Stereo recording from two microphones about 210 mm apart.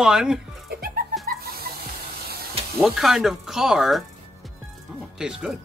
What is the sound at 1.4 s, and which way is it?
Hiss, 45° right (ahead or behind).